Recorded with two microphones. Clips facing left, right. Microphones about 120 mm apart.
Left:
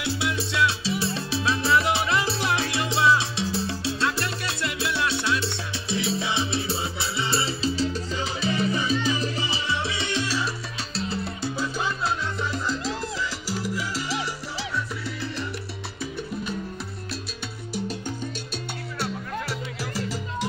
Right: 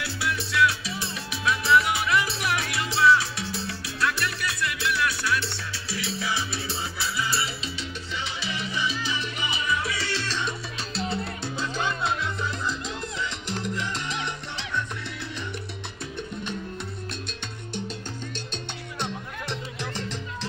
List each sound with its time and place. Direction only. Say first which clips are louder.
0.0 s music: left 3 dB; 20° left (ahead or behind)
11.0 s salsa music: left 1 dB; centre (ahead or behind)
18.9 s music: left 3 dB; 5° left (ahead or behind)